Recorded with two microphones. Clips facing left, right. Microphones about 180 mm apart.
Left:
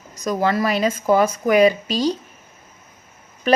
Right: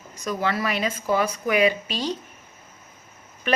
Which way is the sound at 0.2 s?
40° left (ahead or behind).